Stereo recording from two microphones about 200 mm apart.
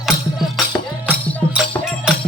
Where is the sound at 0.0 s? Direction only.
Centre (ahead or behind).